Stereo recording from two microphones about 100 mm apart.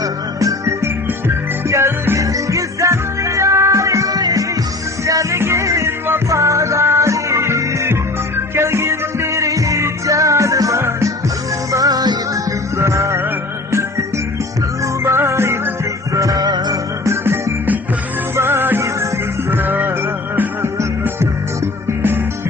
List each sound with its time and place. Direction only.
0.0 s music: 35° right (ahead or behind)
12.7 s music: 30° right (ahead or behind)
15.0 s music: 25° right (ahead or behind)
16.1 s music: 35° right (ahead or behind)
17.1 s music: 25° right (ahead or behind)